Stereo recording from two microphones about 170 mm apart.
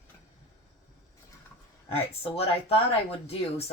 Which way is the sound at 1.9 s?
35° left (ahead or behind).